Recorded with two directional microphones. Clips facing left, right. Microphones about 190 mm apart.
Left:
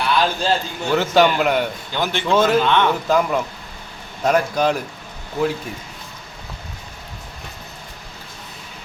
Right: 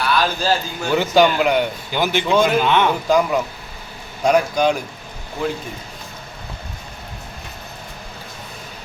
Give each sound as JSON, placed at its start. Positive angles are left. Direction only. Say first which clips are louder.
{"t": 0.0, "sound": "speech", "louder": "even", "side_deg": 20}
{"t": 0.9, "sound": "a man's voice", "louder": "right 1 dB", "side_deg": 0}